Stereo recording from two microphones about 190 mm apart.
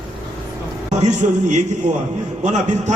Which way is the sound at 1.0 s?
40° right (ahead or behind).